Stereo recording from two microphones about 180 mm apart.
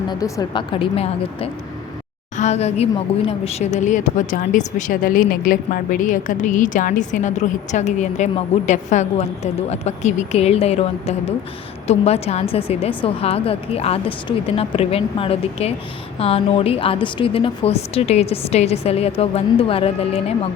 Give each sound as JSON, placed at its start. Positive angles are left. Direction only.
{"t": 0.1, "sound": "a woman's voice", "side_deg": 20}